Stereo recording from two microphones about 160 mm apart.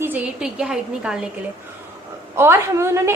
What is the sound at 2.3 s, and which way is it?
Speech, 15° right (ahead or behind).